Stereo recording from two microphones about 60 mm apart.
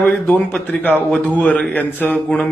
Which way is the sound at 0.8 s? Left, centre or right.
Left.